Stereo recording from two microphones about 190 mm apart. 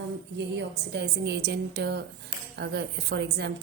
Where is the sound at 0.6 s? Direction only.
65° right (ahead or behind).